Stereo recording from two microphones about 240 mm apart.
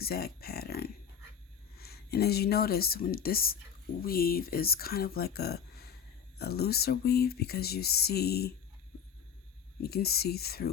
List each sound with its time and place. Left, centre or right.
0.0 s speech: left
9.8 s speech: left